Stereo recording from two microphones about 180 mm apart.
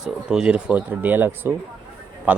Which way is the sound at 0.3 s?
5° right (ahead or behind).